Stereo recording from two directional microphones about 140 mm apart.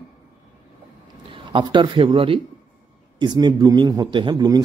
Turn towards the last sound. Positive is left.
turn(degrees=-30)  # may be behind; listen again after turning